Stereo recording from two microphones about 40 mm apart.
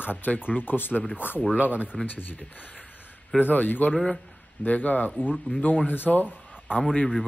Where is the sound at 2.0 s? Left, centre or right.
Left.